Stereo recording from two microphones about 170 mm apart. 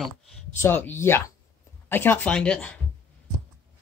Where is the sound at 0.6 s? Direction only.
10° left (ahead or behind).